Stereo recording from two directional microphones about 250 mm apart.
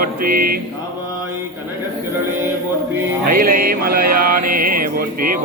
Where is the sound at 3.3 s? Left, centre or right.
Right.